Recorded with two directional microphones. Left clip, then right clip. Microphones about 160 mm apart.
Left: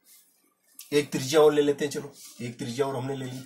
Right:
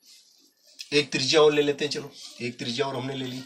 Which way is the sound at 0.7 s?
25° left (ahead or behind).